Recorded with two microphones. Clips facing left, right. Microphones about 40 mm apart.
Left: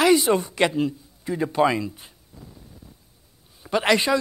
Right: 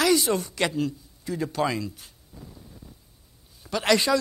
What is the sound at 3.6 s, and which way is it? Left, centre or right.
Speech, left.